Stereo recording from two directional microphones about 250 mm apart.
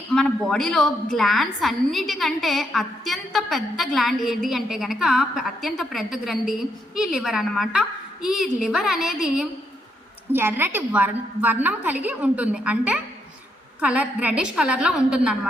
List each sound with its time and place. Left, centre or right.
0.1 s a woman's voice: centre